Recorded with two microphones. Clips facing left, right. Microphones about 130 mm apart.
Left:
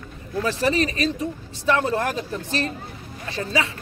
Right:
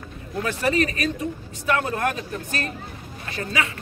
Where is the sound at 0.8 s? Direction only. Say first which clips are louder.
Even; 30° left (ahead or behind).